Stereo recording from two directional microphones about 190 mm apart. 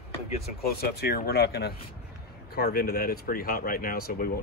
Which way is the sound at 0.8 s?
50° left (ahead or behind).